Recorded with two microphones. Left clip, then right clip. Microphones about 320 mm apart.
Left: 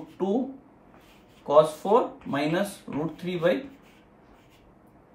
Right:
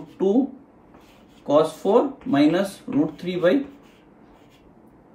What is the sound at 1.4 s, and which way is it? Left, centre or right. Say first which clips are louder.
Speech: right 1 dB; centre.